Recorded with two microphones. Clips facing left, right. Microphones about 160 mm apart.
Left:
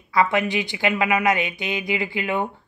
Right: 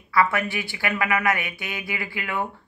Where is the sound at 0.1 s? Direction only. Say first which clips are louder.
Left 2 dB; 20° left (ahead or behind).